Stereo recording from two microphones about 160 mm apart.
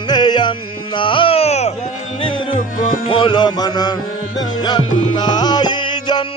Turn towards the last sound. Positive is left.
turn(degrees=30)  # may be behind; listen again after turning